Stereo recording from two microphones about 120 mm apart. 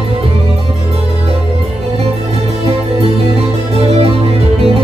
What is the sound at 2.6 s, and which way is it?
Music, 55° right (ahead or behind).